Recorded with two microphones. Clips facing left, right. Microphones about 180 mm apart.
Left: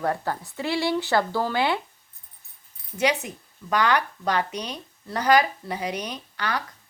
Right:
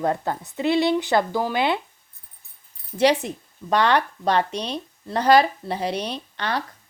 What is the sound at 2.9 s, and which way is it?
Speech, 35° right (ahead or behind).